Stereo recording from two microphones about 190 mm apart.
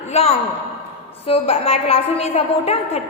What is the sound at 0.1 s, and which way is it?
A man's voice, 35° left (ahead or behind).